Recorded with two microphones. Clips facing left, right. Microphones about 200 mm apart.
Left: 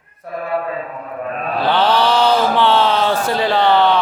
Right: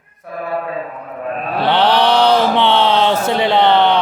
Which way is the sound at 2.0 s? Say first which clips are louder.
Right 2 dB; 20° right (ahead or behind).